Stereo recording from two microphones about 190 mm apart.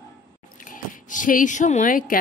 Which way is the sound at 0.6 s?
45° left (ahead or behind).